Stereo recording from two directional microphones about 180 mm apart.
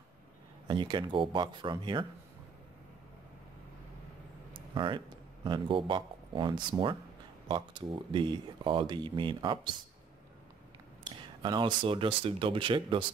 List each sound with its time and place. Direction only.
0.7 s speech: 25° right (ahead or behind)
4.6 s speech: 25° right (ahead or behind)
11.1 s speech: 25° right (ahead or behind)